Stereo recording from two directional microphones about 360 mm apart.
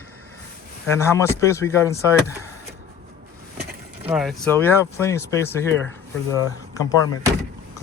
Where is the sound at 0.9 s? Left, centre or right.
Centre.